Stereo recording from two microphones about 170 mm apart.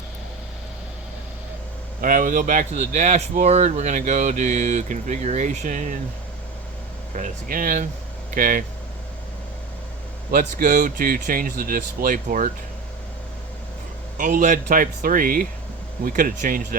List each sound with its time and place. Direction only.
2.0 s speech: 50° right (ahead or behind)
7.2 s speech: 55° right (ahead or behind)
10.3 s speech: 50° right (ahead or behind)
14.2 s speech: 50° right (ahead or behind)